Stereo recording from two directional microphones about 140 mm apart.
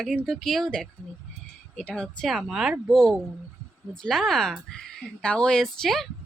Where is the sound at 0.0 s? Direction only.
5° left (ahead or behind).